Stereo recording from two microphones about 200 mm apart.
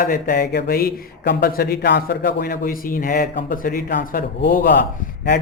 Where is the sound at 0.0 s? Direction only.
45° left (ahead or behind).